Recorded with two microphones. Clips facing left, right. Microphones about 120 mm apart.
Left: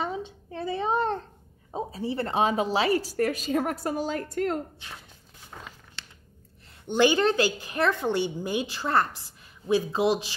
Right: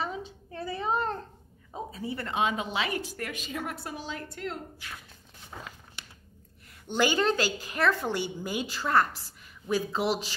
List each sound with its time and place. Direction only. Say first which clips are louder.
0.0 s a sound: left 3 dB; 25° left (ahead or behind)
1.7 s speech: left 5 dB; 30° left (ahead or behind); by 4.6 s 45° left (ahead or behind)
4.8 s speech: even; 25° left (ahead or behind)
6.9 s speech: left 4 dB; 20° left (ahead or behind)